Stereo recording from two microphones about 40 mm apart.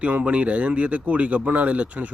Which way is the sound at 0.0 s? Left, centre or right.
Right.